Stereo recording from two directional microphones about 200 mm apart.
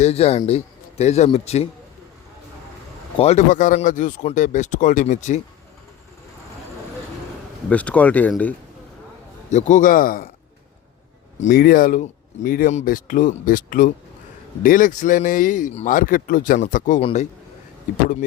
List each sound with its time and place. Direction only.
0.0 s speech: 30° left (ahead or behind)
3.2 s speech: 35° left (ahead or behind)
7.7 s speech: 5° left (ahead or behind)
9.5 s speech: 35° left (ahead or behind)
11.3 s speech: 40° left (ahead or behind)